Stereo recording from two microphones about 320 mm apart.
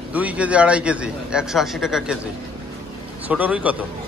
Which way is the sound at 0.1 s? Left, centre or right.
Centre.